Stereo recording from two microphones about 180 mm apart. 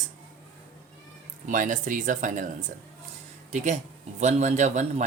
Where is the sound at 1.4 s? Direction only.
45° right (ahead or behind).